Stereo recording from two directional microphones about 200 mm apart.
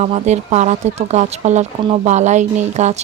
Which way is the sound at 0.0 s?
35° right (ahead or behind).